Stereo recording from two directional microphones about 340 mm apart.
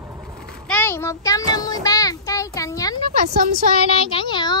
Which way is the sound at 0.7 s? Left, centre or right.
Centre.